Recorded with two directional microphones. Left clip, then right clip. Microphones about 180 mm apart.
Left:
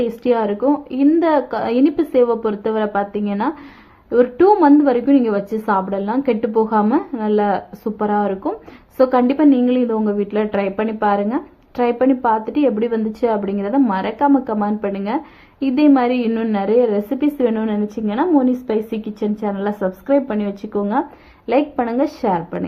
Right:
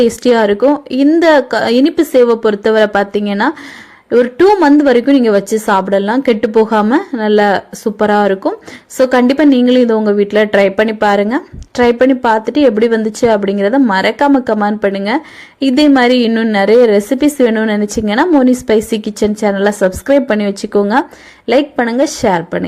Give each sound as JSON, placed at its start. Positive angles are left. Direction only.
{"t": 0.0, "sound": "a woman's voice", "side_deg": -30}